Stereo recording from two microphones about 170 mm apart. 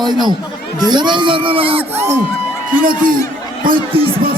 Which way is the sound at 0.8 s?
25° right (ahead or behind).